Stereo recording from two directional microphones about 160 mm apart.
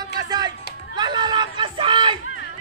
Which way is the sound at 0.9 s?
30° right (ahead or behind).